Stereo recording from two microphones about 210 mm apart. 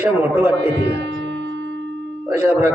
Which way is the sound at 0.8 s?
60° right (ahead or behind).